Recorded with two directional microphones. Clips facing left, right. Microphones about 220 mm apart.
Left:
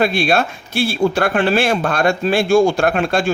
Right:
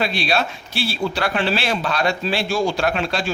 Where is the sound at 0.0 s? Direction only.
50° left (ahead or behind).